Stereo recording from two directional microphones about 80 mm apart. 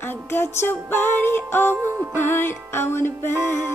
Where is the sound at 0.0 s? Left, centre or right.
Left.